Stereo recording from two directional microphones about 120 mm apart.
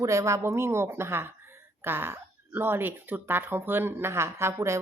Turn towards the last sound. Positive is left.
turn(degrees=-25)  # may be behind; listen again after turning